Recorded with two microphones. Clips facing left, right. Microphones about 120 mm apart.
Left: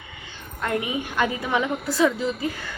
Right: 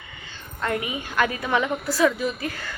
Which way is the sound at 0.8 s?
20° left (ahead or behind).